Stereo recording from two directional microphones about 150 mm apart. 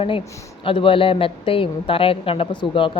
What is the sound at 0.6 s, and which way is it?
A woman's voice, 35° left (ahead or behind).